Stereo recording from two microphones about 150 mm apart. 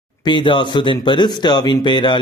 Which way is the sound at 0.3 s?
30° left (ahead or behind).